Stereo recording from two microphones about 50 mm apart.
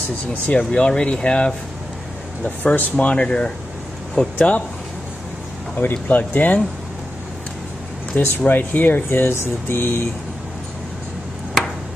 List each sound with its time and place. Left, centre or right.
0.3 s speech: left
2.4 s speech: left
3.1 s speech: left
5.8 s speech: left
8.2 s speech: left